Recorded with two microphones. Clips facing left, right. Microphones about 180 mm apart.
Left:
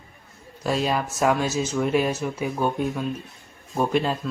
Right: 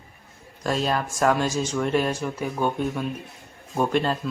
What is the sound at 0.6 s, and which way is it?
Speech, 5° left (ahead or behind).